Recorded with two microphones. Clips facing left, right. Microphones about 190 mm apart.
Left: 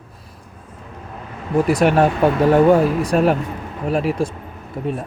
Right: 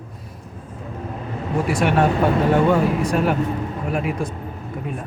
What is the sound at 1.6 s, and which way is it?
Speech, 40° left (ahead or behind).